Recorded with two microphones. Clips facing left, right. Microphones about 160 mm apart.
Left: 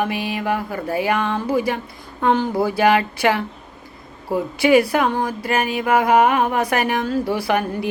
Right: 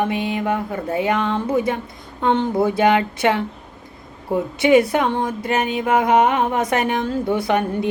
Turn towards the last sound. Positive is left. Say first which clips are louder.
# right 1 dB
turn(degrees=-25)  # may be behind; listen again after turning